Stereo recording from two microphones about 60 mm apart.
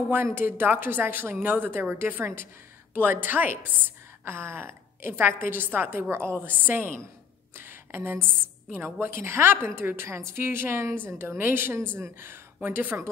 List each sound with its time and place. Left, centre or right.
0.1 s a woman's voice: right
4.2 s a woman's voice: right
7.5 s a sound: right
9.0 s a woman's voice: right
10.0 s a woman's voice: right